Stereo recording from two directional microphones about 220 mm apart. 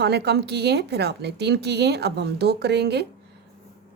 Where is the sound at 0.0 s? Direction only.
50° right (ahead or behind).